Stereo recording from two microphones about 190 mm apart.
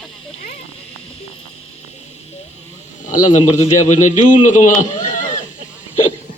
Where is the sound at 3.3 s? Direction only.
35° left (ahead or behind).